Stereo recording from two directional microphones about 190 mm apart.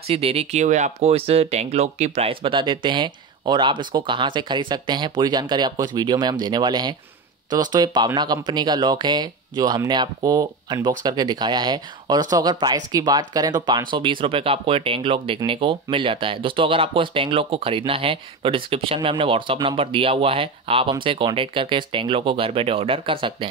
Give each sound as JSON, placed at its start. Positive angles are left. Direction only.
{"t": 0.0, "sound": "speech", "side_deg": -30}